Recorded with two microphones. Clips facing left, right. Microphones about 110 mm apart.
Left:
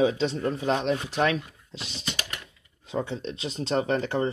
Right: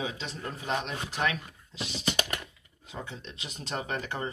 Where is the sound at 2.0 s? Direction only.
25° right (ahead or behind).